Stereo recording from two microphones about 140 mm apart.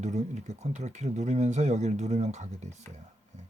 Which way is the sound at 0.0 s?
55° right (ahead or behind).